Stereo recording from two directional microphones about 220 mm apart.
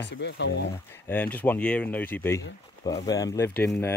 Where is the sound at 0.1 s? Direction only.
50° left (ahead or behind).